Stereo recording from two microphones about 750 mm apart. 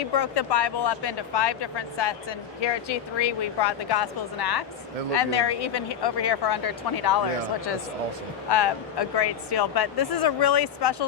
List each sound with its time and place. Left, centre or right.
0.2 s speech: left
8.4 s speech: left